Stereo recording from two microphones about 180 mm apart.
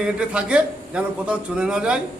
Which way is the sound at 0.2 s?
5° right (ahead or behind).